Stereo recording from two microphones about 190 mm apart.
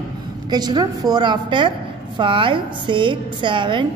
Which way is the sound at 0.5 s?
20° right (ahead or behind).